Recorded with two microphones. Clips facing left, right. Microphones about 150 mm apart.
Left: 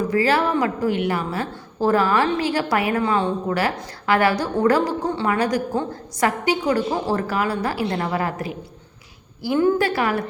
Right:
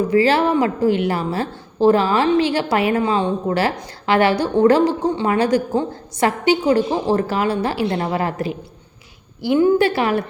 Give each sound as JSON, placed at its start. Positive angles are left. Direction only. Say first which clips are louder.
{"t": 0.1, "sound": "a woman's voice", "louder": "right 4 dB", "side_deg": -25}